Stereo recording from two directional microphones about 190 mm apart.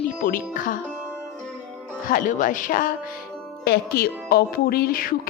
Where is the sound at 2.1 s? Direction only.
45° left (ahead or behind).